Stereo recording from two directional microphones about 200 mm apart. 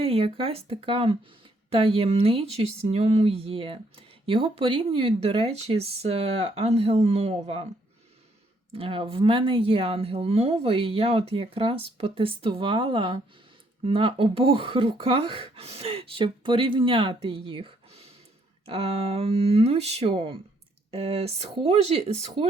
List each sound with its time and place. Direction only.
0.0 s speech: 30° right (ahead or behind)
8.7 s speech: 25° right (ahead or behind)